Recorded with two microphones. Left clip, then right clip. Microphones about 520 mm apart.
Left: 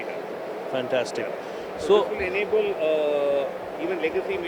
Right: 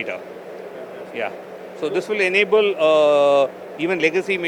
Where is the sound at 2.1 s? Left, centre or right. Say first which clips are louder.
Right 7 dB; right.